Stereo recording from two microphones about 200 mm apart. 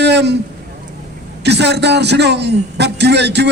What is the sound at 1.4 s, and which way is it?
A man's voice, 55° right (ahead or behind).